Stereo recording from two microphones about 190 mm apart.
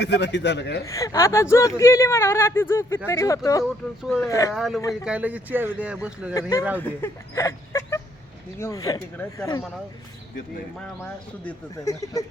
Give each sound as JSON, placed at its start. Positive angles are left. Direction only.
{"t": 0.0, "sound": "a man's voice", "side_deg": 65}
{"t": 0.9, "sound": "speech", "side_deg": 15}
{"t": 3.6, "sound": "speech", "side_deg": 0}
{"t": 4.3, "sound": "speech", "side_deg": 15}
{"t": 4.5, "sound": "speech", "side_deg": 0}
{"t": 6.7, "sound": "speech", "side_deg": 10}
{"t": 10.8, "sound": "speech", "side_deg": 5}
{"t": 11.7, "sound": "speech", "side_deg": 20}